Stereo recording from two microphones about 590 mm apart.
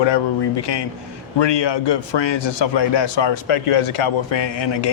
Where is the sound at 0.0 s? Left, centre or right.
Left.